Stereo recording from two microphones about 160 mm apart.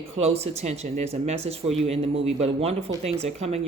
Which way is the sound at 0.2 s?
40° right (ahead or behind).